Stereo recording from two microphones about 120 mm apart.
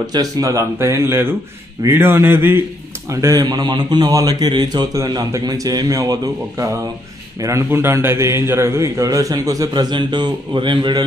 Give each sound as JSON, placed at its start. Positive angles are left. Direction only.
{"t": 0.0, "sound": "a man's voice", "side_deg": -30}